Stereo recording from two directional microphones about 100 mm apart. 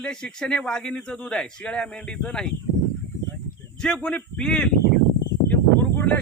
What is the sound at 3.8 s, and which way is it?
Speech, 10° left (ahead or behind).